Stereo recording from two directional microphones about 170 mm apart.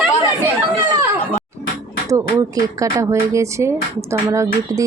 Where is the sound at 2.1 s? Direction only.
20° right (ahead or behind).